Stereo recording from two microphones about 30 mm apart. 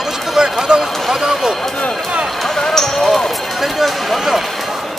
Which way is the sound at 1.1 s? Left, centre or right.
Centre.